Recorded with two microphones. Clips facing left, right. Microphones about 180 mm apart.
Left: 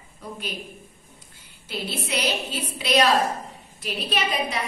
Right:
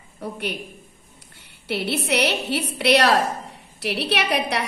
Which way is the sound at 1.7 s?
70° right (ahead or behind).